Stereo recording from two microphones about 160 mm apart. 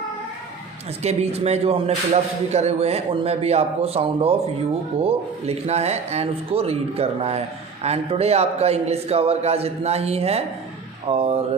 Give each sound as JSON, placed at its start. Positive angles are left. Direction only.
{"t": 1.0, "sound": "a man's voice", "side_deg": -40}